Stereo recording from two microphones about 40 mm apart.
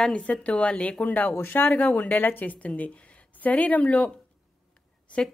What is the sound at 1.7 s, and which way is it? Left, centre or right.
A woman's voice, left.